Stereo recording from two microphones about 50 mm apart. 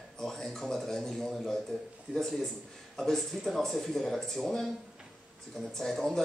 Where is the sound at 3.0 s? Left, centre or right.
Centre.